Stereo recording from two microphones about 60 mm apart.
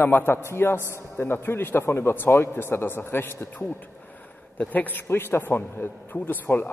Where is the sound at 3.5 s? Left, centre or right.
Left.